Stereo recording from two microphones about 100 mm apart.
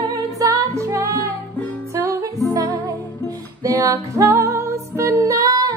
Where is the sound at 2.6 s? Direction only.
35° right (ahead or behind).